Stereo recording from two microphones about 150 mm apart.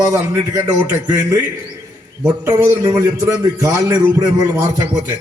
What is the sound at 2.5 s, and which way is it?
A man's voice, 25° right (ahead or behind).